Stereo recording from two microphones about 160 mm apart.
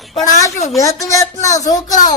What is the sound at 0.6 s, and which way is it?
Music, 20° left (ahead or behind).